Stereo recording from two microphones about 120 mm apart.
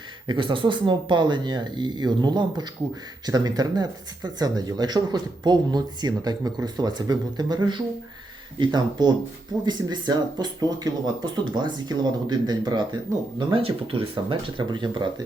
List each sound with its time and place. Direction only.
0.3 s speech: 45° right (ahead or behind)
13.5 s speech: 50° right (ahead or behind)